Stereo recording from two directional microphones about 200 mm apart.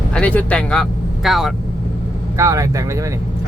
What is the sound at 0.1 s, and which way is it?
Speech, 5° left (ahead or behind).